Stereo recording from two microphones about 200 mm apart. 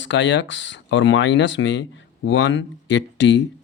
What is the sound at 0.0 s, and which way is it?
Speech, 65° left (ahead or behind).